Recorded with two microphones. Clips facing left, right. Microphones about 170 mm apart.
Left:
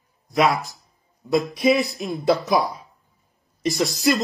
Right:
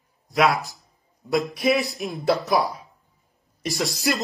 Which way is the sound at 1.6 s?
Centre (ahead or behind).